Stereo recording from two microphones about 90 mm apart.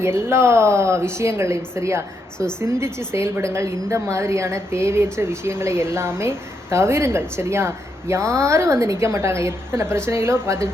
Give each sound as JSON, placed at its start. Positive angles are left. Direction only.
{"t": 0.0, "sound": "a woman's voice", "side_deg": -30}